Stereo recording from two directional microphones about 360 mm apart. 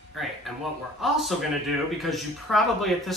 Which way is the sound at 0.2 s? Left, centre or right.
Centre.